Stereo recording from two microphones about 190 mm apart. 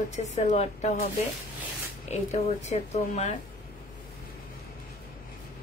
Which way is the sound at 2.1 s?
35° left (ahead or behind).